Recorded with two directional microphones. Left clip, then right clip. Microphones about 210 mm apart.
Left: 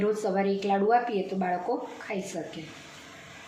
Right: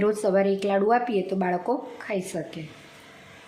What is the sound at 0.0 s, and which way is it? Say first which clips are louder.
Speech: right 5 dB; 50° right (ahead or behind).